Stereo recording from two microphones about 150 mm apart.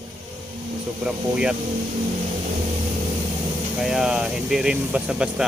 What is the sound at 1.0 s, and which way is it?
Speech, 5° right (ahead or behind).